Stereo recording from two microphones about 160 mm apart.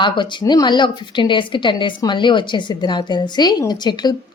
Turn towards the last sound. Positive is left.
turn(degrees=25)  # may be behind; listen again after turning